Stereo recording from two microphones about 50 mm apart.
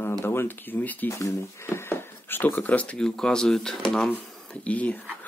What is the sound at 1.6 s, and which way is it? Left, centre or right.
Whispering, left.